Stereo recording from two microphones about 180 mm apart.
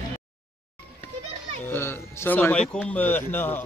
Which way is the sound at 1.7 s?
10° left (ahead or behind).